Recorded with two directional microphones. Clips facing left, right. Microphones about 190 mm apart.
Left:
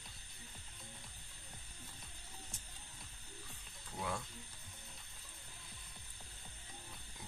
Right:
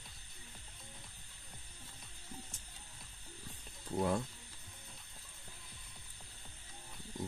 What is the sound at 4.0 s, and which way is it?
Speech, 40° right (ahead or behind).